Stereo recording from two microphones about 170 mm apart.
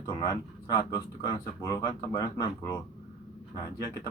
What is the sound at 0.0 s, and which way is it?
Speech, 25° left (ahead or behind).